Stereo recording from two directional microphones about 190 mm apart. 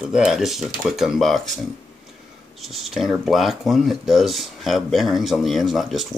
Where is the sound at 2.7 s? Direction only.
Centre (ahead or behind).